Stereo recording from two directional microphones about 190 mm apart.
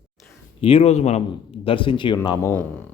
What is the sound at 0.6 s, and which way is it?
Speech, 30° left (ahead or behind).